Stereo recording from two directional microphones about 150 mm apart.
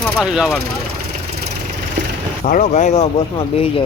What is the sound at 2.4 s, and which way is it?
Speech, 60° left (ahead or behind).